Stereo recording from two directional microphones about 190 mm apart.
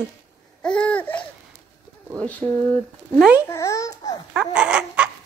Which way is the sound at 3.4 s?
15° left (ahead or behind).